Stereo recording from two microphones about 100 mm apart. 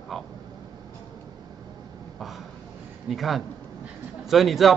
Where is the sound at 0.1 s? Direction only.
Centre (ahead or behind).